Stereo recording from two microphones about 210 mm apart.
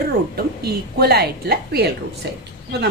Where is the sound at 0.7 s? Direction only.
50° right (ahead or behind).